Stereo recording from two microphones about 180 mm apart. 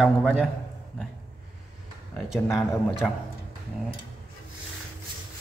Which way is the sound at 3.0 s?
5° left (ahead or behind).